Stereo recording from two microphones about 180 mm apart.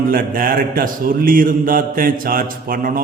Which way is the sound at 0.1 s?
50° right (ahead or behind).